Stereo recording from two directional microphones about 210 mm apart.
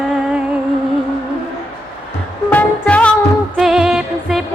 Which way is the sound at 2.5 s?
5° left (ahead or behind).